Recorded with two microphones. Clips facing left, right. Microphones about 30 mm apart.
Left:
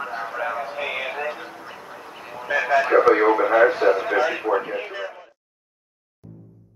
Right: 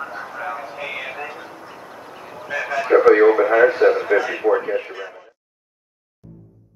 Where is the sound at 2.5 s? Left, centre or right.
Centre.